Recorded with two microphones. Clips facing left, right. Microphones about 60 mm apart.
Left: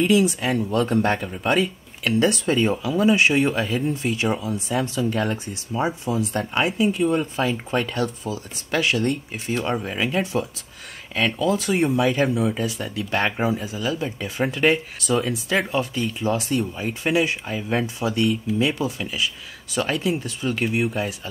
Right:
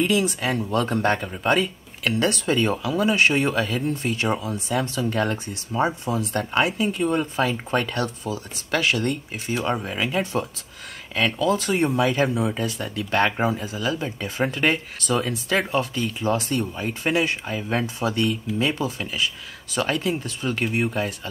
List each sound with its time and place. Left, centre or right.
0.0 s speech: centre